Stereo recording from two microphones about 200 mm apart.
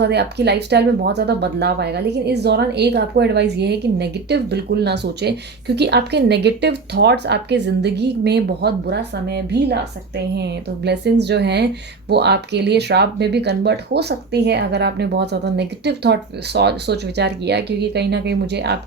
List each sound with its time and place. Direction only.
0.0 s speech: 55° right (ahead or behind)